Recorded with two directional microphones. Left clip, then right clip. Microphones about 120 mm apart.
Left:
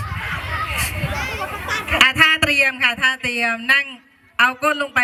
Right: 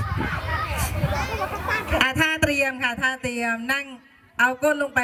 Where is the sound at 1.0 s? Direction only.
5° left (ahead or behind).